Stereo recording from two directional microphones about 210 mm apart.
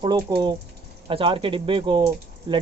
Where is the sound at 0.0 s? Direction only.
20° right (ahead or behind).